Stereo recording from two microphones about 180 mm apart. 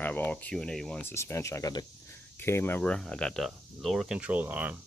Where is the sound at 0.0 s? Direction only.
10° left (ahead or behind).